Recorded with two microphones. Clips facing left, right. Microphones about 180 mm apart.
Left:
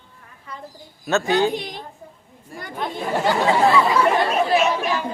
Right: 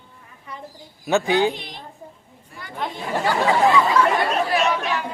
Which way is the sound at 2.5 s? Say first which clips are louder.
Left 6 dB; 45° left (ahead or behind).